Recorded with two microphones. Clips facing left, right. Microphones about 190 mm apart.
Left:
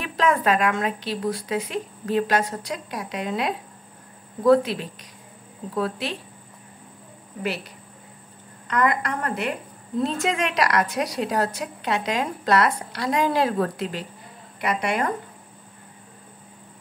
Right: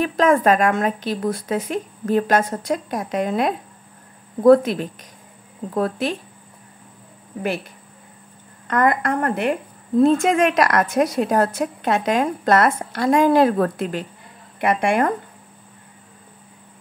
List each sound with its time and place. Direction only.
0.0 s a woman's voice: 45° right (ahead or behind)
8.6 s a woman's voice: 50° right (ahead or behind)